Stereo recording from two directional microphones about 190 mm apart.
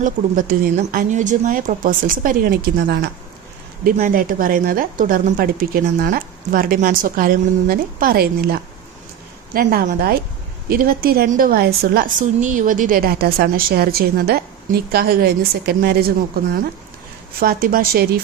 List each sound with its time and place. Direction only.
0.0 s a woman's voice: 45° right (ahead or behind)